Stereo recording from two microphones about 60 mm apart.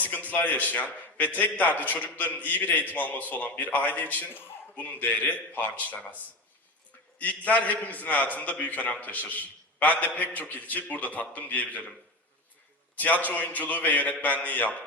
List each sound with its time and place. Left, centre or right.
0.0 s a man's voice: left
7.2 s a man's voice: left
13.0 s a man's voice: left